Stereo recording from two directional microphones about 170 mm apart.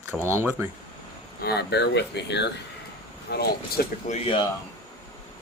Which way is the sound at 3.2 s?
75° left (ahead or behind).